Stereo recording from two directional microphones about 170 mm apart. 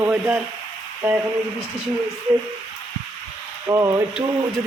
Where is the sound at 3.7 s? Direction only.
15° right (ahead or behind).